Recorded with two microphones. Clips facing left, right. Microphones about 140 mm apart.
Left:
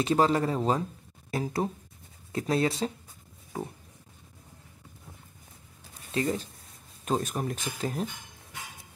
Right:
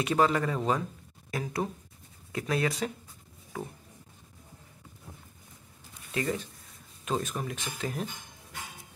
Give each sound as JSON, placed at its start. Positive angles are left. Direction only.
{"t": 0.0, "sound": "speech", "side_deg": 30}
{"t": 6.1, "sound": "speech", "side_deg": 30}